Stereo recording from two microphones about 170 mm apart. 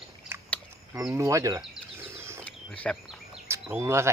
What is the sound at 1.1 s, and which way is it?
Speech, 20° right (ahead or behind).